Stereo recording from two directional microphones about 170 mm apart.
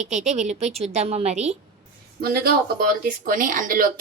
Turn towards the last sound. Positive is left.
turn(degrees=-55)  # may be behind; listen again after turning